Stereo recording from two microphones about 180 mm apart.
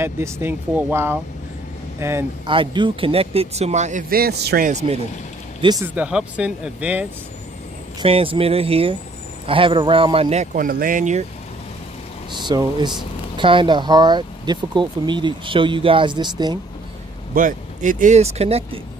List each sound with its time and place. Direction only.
0.0 s speech: 15° right (ahead or behind)
2.4 s speech: 25° right (ahead or behind)
4.1 s a man's voice: 60° right (ahead or behind)
4.6 s speech: 35° right (ahead or behind)
5.6 s speech: 20° right (ahead or behind)
5.9 s speech: 5° right (ahead or behind)
8.0 s speech: 30° right (ahead or behind)
12.4 s speech: 25° right (ahead or behind)
17.3 s speech: 50° right (ahead or behind)